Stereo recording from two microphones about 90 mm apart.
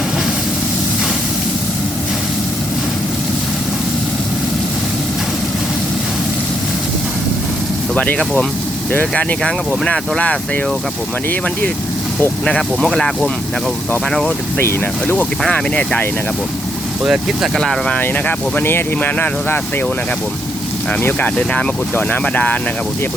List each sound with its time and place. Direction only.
7.9 s speech: 15° left (ahead or behind)
8.2 s speech: 5° left (ahead or behind)
8.9 s speech: 20° left (ahead or behind)
12.5 s speech: 5° left (ahead or behind)
14.6 s speech: 25° left (ahead or behind)
15.1 s speech: 15° left (ahead or behind)
17.0 s speech: 5° right (ahead or behind)
18.0 s speech: 20° left (ahead or behind)
21.0 s speech: 20° left (ahead or behind)